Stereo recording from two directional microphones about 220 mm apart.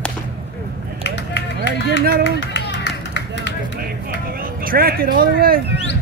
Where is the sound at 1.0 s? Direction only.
50° left (ahead or behind).